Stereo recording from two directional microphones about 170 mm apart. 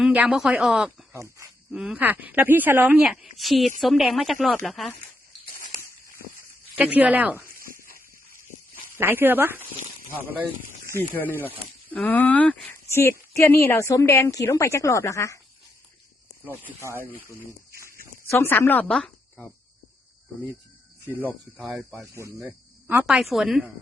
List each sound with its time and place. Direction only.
0.0 s speech: 5° right (ahead or behind)
1.1 s a woman's voice: 15° right (ahead or behind)
1.7 s a woman's voice: 5° right (ahead or behind)
6.7 s a woman's voice: 10° right (ahead or behind)
9.0 s a woman's voice: 10° right (ahead or behind)
11.1 s speech: 10° left (ahead or behind)
16.4 s a woman's voice: 10° right (ahead or behind)
18.3 s speech: 15° left (ahead or behind)
21.2 s speech: 5° right (ahead or behind)